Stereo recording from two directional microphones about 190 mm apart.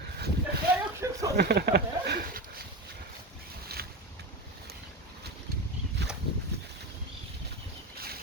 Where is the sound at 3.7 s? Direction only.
55° right (ahead or behind).